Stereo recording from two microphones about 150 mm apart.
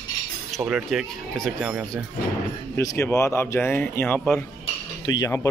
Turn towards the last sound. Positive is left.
turn(degrees=20)  # may be behind; listen again after turning